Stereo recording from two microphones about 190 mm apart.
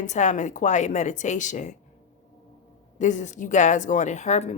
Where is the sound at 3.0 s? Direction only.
40° left (ahead or behind).